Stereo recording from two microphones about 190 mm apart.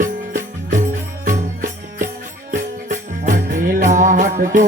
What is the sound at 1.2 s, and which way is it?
Music, 40° right (ahead or behind).